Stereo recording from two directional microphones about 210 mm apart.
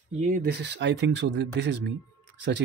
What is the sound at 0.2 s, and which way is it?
Speech, 40° right (ahead or behind).